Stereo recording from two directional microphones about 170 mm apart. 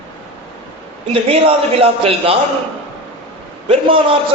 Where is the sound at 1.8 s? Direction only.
35° right (ahead or behind).